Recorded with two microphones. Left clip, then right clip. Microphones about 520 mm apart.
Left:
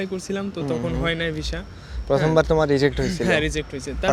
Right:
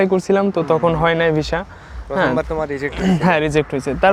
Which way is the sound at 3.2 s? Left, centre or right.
Right.